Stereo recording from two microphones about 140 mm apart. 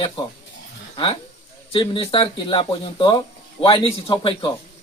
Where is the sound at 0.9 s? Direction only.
35° left (ahead or behind).